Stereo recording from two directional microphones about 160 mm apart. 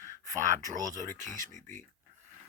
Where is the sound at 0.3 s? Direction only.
50° right (ahead or behind).